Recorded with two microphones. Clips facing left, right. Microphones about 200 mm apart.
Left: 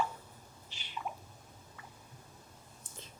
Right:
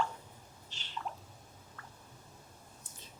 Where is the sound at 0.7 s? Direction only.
10° left (ahead or behind).